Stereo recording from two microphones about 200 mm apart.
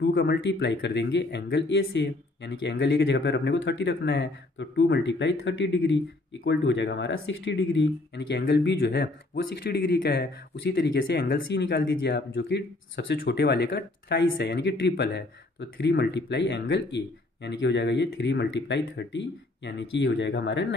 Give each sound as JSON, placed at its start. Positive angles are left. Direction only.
{"t": 0.0, "sound": "speech", "side_deg": 55}